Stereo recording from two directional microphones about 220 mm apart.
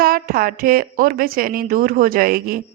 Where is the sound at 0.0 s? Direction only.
40° right (ahead or behind).